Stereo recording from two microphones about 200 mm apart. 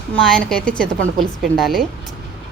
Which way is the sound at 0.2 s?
5° left (ahead or behind).